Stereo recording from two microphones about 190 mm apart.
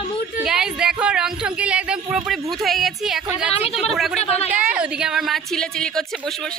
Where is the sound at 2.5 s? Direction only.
Centre (ahead or behind).